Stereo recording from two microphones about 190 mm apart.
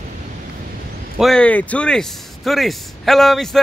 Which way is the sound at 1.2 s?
5° left (ahead or behind).